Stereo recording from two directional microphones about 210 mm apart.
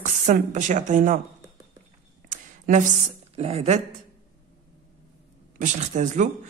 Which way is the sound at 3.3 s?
30° right (ahead or behind).